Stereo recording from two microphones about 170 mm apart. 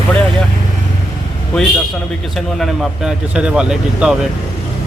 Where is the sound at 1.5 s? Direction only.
5° left (ahead or behind).